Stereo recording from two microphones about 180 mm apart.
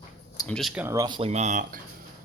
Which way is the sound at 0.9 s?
25° right (ahead or behind).